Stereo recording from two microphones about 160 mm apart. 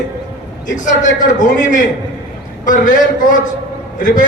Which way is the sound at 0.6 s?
55° left (ahead or behind).